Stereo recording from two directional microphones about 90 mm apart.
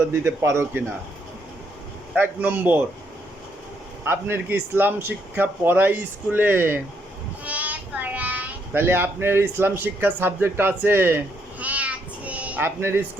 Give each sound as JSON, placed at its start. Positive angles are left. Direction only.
{"t": 0.1, "sound": "a man's voice", "side_deg": -30}
{"t": 2.1, "sound": "a man's voice", "side_deg": -20}
{"t": 4.0, "sound": "a man's voice", "side_deg": -25}
{"t": 11.6, "sound": "a sound", "side_deg": -15}